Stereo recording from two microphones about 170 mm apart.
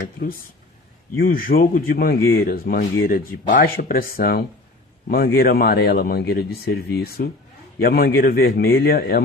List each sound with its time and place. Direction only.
1.2 s speech: 60° left (ahead or behind)